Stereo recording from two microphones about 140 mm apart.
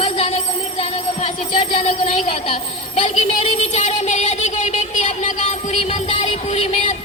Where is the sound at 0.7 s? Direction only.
45° left (ahead or behind).